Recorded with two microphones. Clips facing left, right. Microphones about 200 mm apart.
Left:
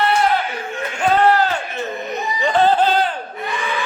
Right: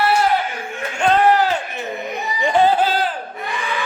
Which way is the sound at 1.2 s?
15° right (ahead or behind).